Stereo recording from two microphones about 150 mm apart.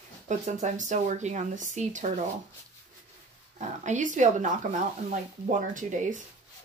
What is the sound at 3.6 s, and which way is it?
Speech, 55° right (ahead or behind).